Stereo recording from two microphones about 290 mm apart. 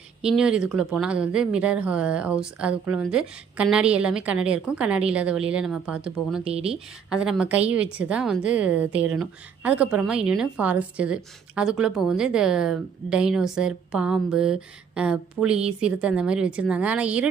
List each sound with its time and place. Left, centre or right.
0.3 s speech: centre
6.4 s speech: centre
7.1 s speech: centre